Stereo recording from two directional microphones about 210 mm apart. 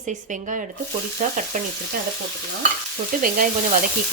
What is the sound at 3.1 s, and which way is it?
Speech, 40° right (ahead or behind).